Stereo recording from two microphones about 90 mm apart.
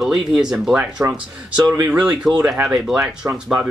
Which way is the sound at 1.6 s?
35° right (ahead or behind).